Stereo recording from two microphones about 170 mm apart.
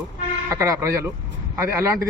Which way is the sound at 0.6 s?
15° right (ahead or behind).